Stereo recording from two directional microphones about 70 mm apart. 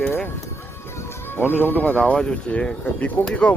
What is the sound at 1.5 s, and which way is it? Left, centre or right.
Speech, left.